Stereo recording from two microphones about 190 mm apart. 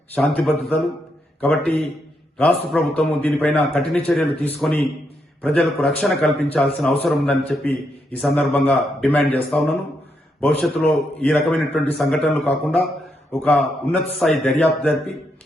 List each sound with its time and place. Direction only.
0.1 s a man's voice: centre (ahead or behind)